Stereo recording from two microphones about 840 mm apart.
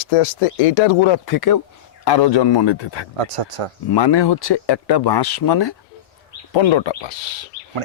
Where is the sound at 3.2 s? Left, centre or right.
Right.